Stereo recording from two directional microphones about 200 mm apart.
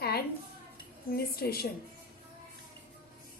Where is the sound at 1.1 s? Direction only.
50° left (ahead or behind).